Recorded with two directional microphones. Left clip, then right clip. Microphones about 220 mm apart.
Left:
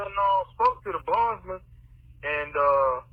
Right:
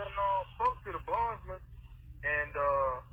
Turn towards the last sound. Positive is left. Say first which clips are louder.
# left 9 dB
turn(degrees=35)  # may be behind; listen again after turning